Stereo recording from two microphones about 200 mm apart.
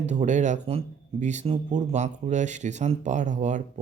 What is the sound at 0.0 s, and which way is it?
Speech, 35° right (ahead or behind).